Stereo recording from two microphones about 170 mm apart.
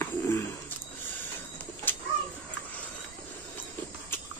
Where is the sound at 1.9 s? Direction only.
10° left (ahead or behind).